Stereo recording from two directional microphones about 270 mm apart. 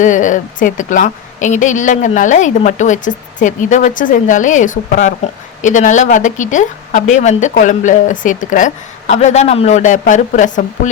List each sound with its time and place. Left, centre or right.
0.0 s a woman's voice: left